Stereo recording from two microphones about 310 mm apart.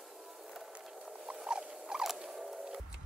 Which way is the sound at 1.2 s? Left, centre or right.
Centre.